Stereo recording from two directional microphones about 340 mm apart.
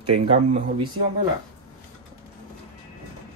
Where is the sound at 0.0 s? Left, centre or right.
Right.